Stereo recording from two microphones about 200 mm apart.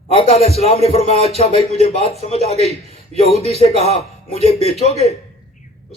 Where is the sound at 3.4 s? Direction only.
30° left (ahead or behind).